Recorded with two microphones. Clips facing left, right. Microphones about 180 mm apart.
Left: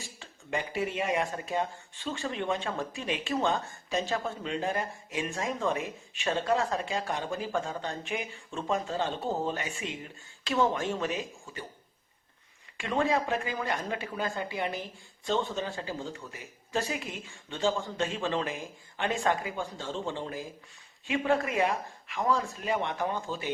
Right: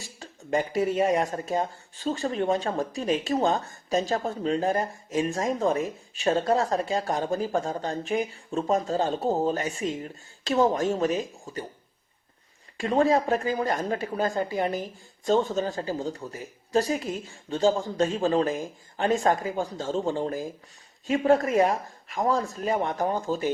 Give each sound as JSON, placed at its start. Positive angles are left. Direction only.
{"t": 0.2, "sound": "speech", "side_deg": -40}
{"t": 12.7, "sound": "speech", "side_deg": -40}